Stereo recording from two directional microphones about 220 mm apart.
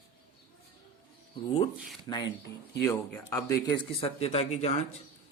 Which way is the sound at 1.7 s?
Centre (ahead or behind).